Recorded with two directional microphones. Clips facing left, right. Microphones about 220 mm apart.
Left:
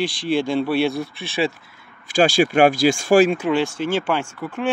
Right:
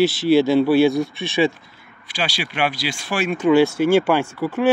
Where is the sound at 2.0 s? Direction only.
45° left (ahead or behind).